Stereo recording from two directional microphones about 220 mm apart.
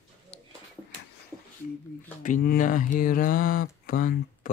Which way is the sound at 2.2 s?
40° left (ahead or behind).